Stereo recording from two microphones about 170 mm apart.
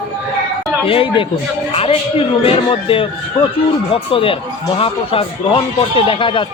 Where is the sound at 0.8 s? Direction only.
30° left (ahead or behind).